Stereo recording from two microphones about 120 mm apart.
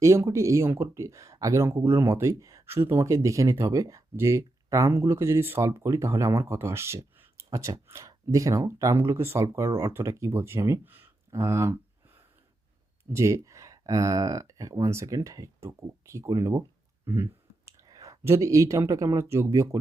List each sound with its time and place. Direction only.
0.0 s speech: 25° right (ahead or behind)